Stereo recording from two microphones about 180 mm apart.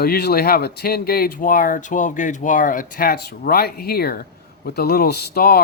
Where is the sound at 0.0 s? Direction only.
60° left (ahead or behind).